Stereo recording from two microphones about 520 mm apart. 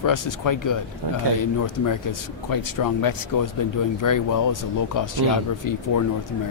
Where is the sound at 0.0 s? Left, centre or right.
Left.